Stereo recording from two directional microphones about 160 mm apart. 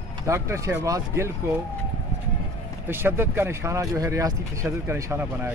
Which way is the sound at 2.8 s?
15° right (ahead or behind).